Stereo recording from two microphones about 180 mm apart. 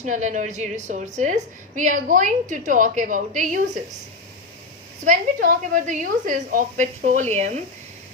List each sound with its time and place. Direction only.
0.0 s a woman's voice: 45° right (ahead or behind)
5.0 s a woman's voice: 50° right (ahead or behind)